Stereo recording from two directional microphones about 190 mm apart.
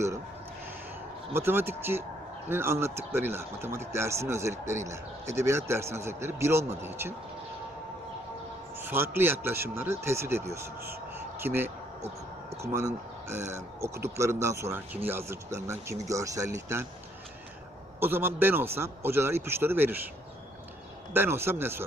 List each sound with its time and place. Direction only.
1.3 s speech: 10° right (ahead or behind)
8.8 s speech: 10° right (ahead or behind)
18.0 s speech: 10° right (ahead or behind)
21.1 s speech: 10° right (ahead or behind)